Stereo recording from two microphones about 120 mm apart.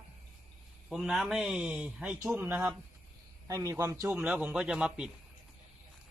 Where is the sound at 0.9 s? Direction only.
Centre (ahead or behind).